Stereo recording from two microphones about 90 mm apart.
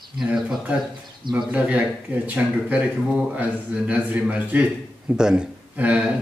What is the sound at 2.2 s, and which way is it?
A man's voice, 15° right (ahead or behind).